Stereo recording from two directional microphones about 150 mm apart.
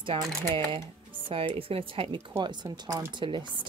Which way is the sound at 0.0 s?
35° right (ahead or behind).